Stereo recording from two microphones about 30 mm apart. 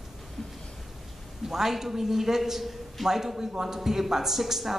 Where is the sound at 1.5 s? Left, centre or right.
Centre.